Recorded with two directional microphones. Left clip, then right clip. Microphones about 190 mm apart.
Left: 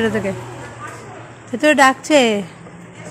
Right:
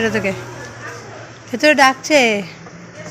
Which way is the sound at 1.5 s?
20° left (ahead or behind).